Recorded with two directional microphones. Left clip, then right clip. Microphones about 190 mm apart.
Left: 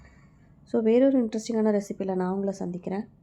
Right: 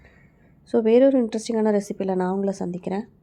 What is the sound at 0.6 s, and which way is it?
Speech, 30° right (ahead or behind).